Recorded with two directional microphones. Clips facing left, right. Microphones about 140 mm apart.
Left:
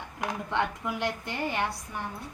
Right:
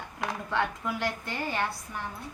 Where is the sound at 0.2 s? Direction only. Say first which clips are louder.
Even; 15° left (ahead or behind).